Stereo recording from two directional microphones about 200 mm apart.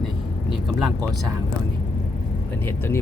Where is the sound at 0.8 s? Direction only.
Centre (ahead or behind).